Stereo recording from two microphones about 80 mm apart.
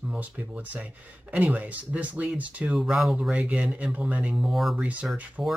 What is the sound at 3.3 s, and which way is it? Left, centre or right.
Speech, centre.